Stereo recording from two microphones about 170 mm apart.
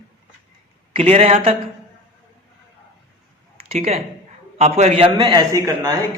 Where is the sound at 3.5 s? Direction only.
35° right (ahead or behind).